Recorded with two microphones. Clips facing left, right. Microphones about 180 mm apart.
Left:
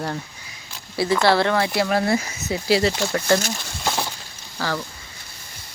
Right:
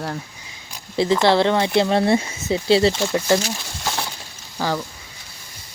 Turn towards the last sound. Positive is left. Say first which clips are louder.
# right 3 dB
turn(degrees=-15)  # may be behind; listen again after turning